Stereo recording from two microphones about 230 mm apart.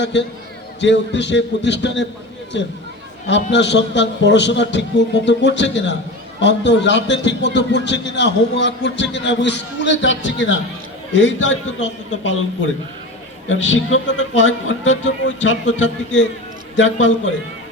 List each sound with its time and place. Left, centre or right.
0.0 s a man's voice: left